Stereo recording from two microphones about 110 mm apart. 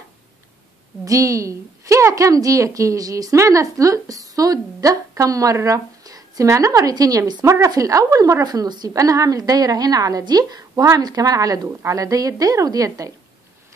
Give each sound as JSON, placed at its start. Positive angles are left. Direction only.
{"t": 1.0, "sound": "a woman's voice", "side_deg": -30}